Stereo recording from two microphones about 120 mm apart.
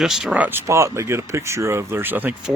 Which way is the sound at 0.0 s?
5° right (ahead or behind).